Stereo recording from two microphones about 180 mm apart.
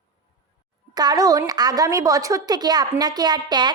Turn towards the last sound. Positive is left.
turn(degrees=-25)  # may be behind; listen again after turning